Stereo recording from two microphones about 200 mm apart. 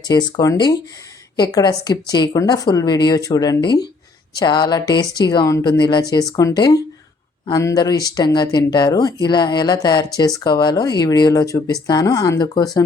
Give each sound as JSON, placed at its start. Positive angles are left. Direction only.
{"t": 0.0, "sound": "speech", "side_deg": 20}